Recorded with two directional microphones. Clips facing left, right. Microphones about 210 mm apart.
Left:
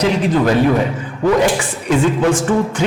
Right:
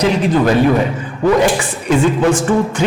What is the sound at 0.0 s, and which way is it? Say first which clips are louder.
A man's voice: right 1 dB; 15° right (ahead or behind).